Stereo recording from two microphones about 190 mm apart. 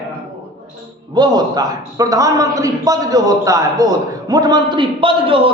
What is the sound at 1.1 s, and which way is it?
A man's voice, 20° right (ahead or behind).